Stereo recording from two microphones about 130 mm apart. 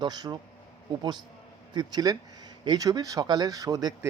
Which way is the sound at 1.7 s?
30° right (ahead or behind).